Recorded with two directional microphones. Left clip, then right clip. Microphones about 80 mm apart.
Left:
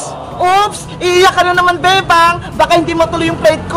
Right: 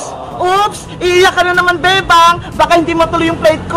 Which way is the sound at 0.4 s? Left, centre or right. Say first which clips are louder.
Left 1 dB; centre.